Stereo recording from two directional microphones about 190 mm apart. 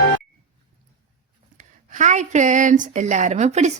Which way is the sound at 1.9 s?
40° right (ahead or behind).